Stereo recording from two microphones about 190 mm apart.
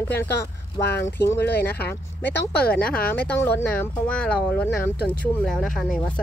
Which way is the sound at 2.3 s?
60° left (ahead or behind).